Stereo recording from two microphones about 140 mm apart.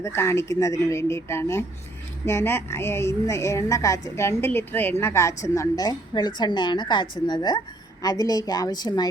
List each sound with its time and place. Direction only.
0.0 s a woman's voice: 20° left (ahead or behind)